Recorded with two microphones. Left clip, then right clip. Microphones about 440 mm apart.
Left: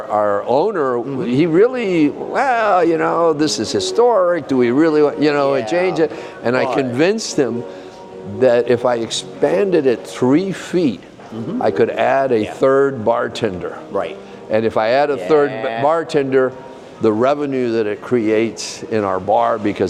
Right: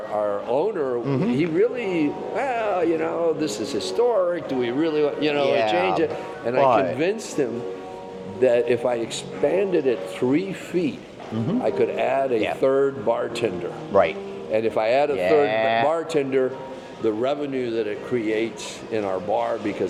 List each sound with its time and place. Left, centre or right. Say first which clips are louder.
0.1 s speech: left 8 dB; left
6.4 s a man's voice: left 1 dB; left
14.5 s a man's voice: left 6 dB; left
15.4 s speech: left 1 dB; right
15.9 s a man's voice: left 7 dB; left
17.1 s a man's voice: left 8 dB; left
18.9 s speech: left 8 dB; left